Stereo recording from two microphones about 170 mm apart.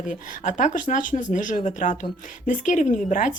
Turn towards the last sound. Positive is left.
turn(degrees=50)  # may be behind; listen again after turning